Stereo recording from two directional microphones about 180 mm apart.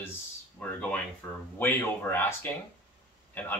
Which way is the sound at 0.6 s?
10° left (ahead or behind).